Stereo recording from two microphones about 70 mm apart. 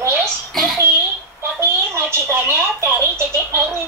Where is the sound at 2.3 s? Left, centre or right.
Right.